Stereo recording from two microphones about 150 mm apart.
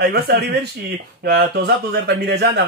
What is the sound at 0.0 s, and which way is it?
A man's voice, 90° right.